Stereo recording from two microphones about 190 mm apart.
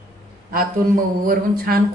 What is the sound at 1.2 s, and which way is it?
Speech, 50° right (ahead or behind).